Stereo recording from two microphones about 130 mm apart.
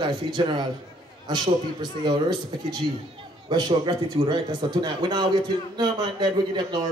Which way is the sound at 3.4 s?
35° right (ahead or behind).